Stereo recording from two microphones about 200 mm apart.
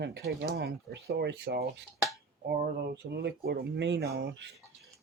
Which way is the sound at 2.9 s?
55° right (ahead or behind).